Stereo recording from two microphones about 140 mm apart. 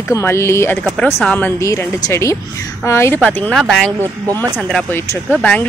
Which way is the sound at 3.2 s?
5° left (ahead or behind).